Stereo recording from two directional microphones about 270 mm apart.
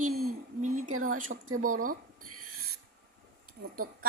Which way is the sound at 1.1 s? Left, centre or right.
Right.